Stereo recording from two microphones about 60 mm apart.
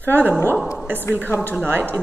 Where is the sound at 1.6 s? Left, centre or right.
Right.